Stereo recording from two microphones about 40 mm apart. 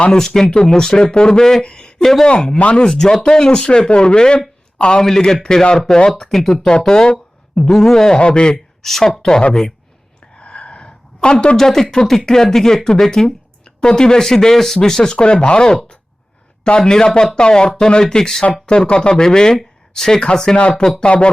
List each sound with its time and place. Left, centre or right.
0.2 s speech: centre
1.6 s a sound: left
2.2 s speech: left
2.9 s speech: centre
5.0 s speech: centre
6.7 s speech: centre
8.8 s speech: centre
10.3 s gasp: left
11.5 s speech: centre
15.1 s speech: left